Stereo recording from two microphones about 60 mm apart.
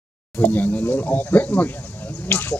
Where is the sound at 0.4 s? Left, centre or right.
Left.